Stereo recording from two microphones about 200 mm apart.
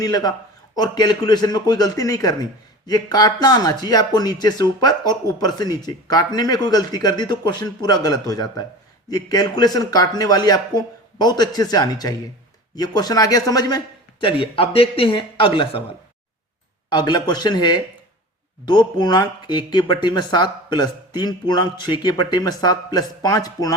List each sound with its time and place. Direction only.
0.0 s speech: 20° left (ahead or behind)
16.9 s speech: 20° left (ahead or behind)